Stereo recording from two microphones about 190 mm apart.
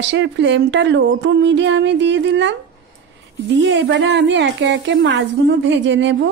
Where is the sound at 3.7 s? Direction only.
70° right (ahead or behind).